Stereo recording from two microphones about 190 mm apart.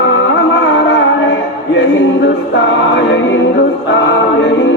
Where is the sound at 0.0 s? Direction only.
75° left (ahead or behind).